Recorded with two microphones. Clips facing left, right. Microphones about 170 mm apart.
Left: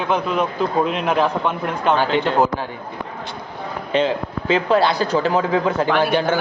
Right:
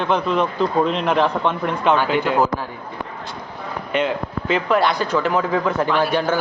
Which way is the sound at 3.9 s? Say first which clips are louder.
Left 2 dB; 30° left (ahead or behind).